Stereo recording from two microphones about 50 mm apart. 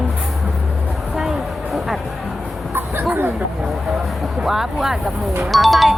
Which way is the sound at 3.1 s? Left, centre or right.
Right.